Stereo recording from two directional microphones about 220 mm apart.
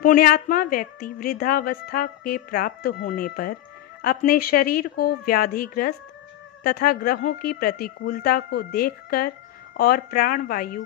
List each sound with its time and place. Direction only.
0.0 s a woman's voice: 40° left (ahead or behind)